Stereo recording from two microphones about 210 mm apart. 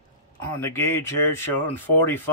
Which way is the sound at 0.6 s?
15° left (ahead or behind).